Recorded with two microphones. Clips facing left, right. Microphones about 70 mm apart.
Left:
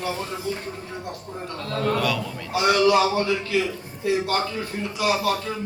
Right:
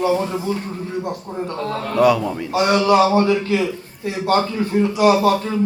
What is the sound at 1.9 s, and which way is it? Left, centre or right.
A man's voice, right.